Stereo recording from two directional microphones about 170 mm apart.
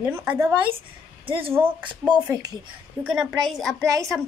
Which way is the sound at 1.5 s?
10° right (ahead or behind).